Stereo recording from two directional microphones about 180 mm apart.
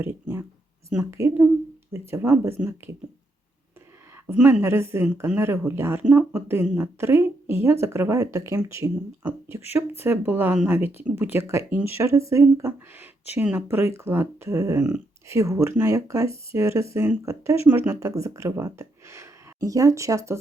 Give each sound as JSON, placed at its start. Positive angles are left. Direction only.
{"t": 0.0, "sound": "a woman's voice", "side_deg": -15}
{"t": 4.3, "sound": "speech", "side_deg": -10}